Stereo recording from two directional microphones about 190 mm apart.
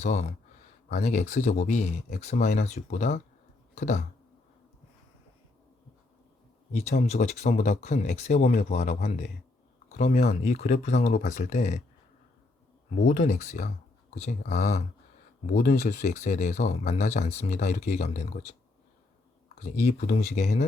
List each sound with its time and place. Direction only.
0.0 s speech: 35° left (ahead or behind)
7.1 s speech: 35° left (ahead or behind)
13.1 s speech: 40° left (ahead or behind)
19.6 s speech: 40° left (ahead or behind)